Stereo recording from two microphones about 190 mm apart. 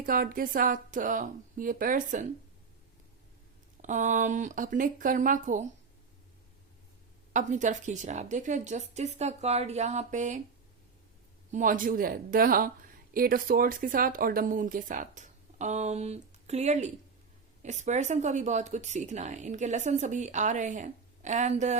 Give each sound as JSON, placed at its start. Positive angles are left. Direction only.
{"t": 0.0, "sound": "speech", "side_deg": -50}
{"t": 3.8, "sound": "speech", "side_deg": -40}
{"t": 7.3, "sound": "speech", "side_deg": -40}
{"t": 11.5, "sound": "speech", "side_deg": -45}